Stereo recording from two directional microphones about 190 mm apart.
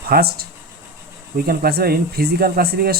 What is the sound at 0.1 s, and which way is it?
Speech, 55° right (ahead or behind).